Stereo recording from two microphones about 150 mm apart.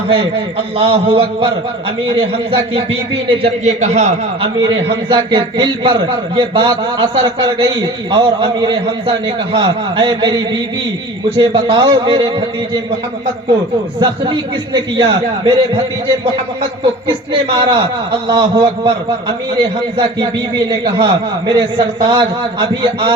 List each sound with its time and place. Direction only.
0.1 s a man's voice: 40° right (ahead or behind)
5.0 s a man's voice: 30° right (ahead or behind)
14.0 s a man's voice: 30° right (ahead or behind)
17.1 s a man's voice: 30° right (ahead or behind)
20.7 s a man's voice: 30° right (ahead or behind)